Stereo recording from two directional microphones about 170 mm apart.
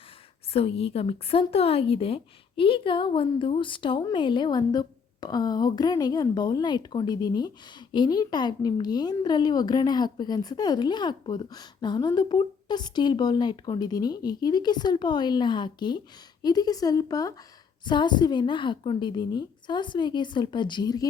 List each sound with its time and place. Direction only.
0.5 s speech: 35° left (ahead or behind)